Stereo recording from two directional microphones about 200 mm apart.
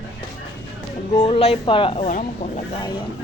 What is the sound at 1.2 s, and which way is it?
Speech, 30° left (ahead or behind).